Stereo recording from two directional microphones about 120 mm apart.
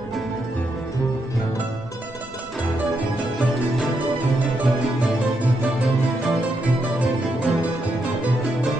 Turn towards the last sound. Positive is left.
turn(degrees=0)  # may be behind; listen again after turning